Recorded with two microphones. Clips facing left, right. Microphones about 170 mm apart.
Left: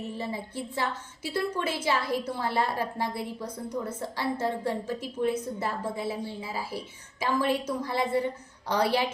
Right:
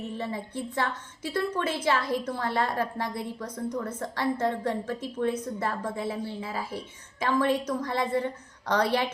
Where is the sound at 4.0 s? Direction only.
10° left (ahead or behind).